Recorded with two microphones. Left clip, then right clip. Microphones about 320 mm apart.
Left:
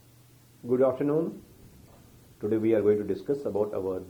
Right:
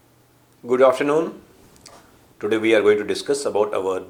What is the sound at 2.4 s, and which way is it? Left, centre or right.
A woman's voice, centre.